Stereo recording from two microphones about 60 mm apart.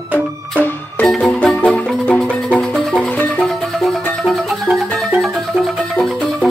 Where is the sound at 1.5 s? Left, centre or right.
Left.